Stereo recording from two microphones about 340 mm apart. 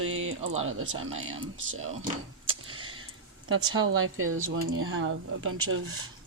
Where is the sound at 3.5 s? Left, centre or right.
Right.